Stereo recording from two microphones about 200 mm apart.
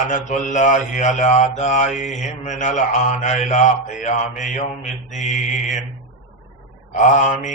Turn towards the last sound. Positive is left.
turn(degrees=40)  # may be behind; listen again after turning